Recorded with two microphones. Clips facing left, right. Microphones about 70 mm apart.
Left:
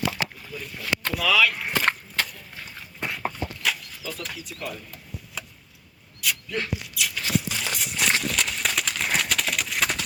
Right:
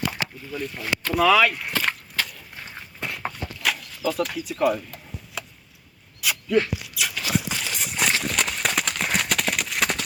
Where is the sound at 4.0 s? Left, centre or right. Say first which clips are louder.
Right 15 dB; right.